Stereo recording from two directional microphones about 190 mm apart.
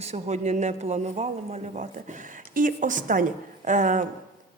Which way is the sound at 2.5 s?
45° right (ahead or behind).